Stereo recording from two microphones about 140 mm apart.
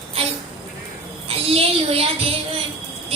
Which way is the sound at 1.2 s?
45° right (ahead or behind).